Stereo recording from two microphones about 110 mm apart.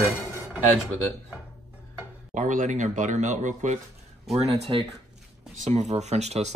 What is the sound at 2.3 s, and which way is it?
Speech, 90° right.